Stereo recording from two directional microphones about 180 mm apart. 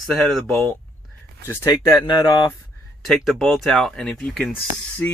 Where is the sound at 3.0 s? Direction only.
Centre (ahead or behind).